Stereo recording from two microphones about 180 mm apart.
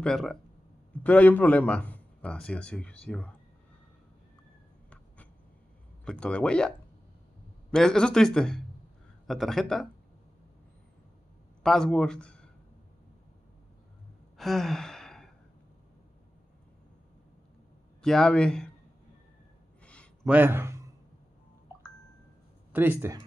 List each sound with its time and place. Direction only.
0.0 s speech: 5° left (ahead or behind)
4.8 s a sound: 10° left (ahead or behind)
6.0 s speech: 5° left (ahead or behind)
7.7 s speech: 5° left (ahead or behind)
11.6 s speech: 5° left (ahead or behind)
14.3 s sigh: centre (ahead or behind)
18.0 s speech: 5° left (ahead or behind)
19.8 s a sound: 5° left (ahead or behind)
20.2 s speech: 10° right (ahead or behind)
22.7 s speech: 10° right (ahead or behind)